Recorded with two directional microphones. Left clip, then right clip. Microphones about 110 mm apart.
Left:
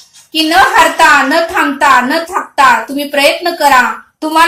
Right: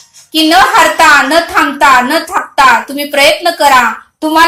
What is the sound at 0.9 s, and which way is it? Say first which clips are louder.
Speech: right 1 dB; 35° right (ahead or behind).